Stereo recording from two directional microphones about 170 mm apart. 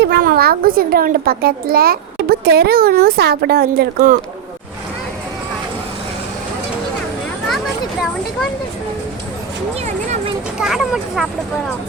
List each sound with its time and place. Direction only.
0.0 s a child's voice: 60° right (ahead or behind)
10.6 s speech: centre (ahead or behind)